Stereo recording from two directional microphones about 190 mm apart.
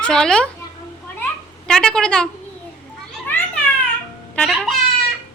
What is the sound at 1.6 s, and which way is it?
Speech, 5° left (ahead or behind).